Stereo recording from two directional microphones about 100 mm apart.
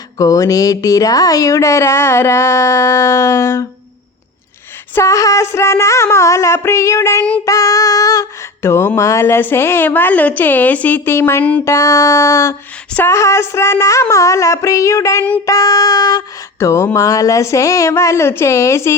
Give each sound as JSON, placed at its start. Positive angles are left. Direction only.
{"t": 0.2, "sound": "speech", "side_deg": 35}
{"t": 4.9, "sound": "a woman's voice", "side_deg": 30}
{"t": 7.4, "sound": "a sound", "side_deg": 35}
{"t": 9.0, "sound": "a woman's voice", "side_deg": 30}